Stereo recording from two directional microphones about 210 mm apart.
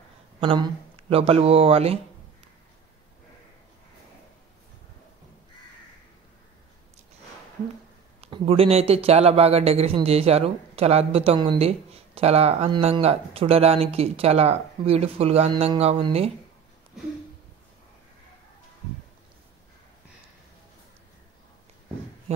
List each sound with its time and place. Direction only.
0.4 s a man's voice: 25° right (ahead or behind)
8.2 s a man's voice: 30° right (ahead or behind)